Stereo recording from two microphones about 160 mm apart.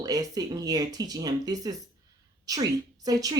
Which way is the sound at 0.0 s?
25° right (ahead or behind).